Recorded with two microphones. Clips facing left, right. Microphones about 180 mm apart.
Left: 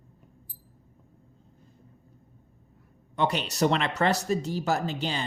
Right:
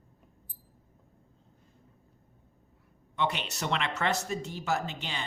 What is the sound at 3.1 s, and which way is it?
Speech, 40° left (ahead or behind).